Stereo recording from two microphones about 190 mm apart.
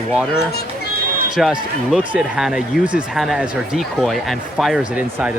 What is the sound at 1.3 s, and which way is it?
Speech, 5° right (ahead or behind).